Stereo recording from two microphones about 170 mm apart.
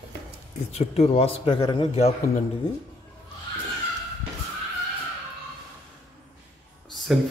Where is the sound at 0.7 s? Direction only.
35° left (ahead or behind).